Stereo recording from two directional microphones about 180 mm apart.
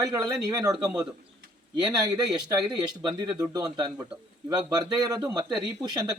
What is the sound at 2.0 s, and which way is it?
Speech, 25° right (ahead or behind).